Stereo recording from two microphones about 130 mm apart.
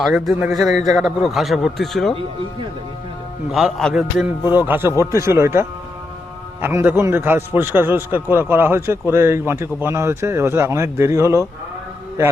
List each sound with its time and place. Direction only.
0.0 s speech: centre (ahead or behind)
0.7 s a man's voice: 30° right (ahead or behind)
0.9 s speech: 5° right (ahead or behind)
3.5 s speech: centre (ahead or behind)
4.4 s a man's voice: 15° right (ahead or behind)